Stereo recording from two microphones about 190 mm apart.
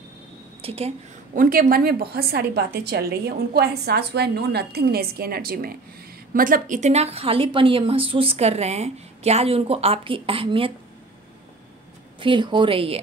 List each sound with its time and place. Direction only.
0.6 s a woman's voice: 30° right (ahead or behind)
1.4 s a woman's voice: 50° right (ahead or behind); by 10.7 s 30° right (ahead or behind)
12.2 s speech: 25° right (ahead or behind)